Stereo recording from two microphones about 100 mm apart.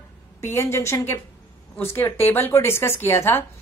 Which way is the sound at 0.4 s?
25° left (ahead or behind).